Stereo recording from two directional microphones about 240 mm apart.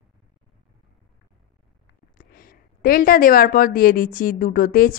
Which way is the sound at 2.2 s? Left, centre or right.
Left.